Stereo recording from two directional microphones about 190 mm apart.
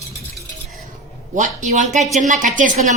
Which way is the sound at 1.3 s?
40° right (ahead or behind).